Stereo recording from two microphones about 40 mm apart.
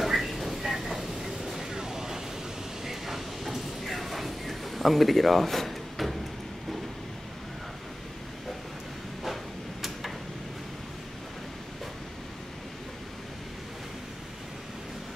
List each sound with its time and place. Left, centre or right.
0.0 s vehicle: centre
2.8 s sliding door: centre
9.2 s a sound: centre